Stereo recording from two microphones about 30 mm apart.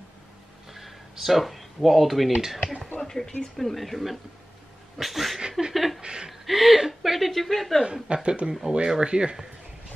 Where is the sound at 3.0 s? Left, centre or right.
Centre.